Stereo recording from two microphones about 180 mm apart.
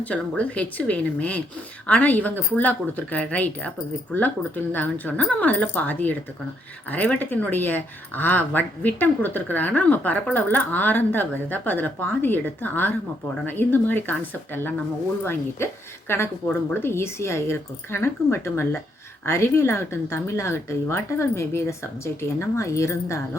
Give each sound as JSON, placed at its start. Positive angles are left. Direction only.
{"t": 0.0, "sound": "speech", "side_deg": 5}